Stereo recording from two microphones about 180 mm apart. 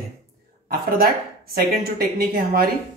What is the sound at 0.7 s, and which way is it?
Speech, 55° right (ahead or behind).